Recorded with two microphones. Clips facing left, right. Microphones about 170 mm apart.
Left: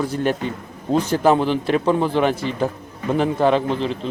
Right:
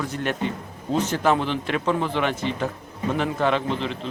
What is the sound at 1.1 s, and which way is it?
Speech, 35° left (ahead or behind).